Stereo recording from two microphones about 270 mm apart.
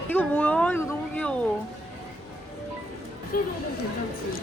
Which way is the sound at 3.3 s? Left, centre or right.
Left.